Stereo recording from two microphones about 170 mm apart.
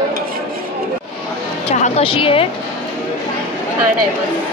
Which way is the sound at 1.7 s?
35° left (ahead or behind).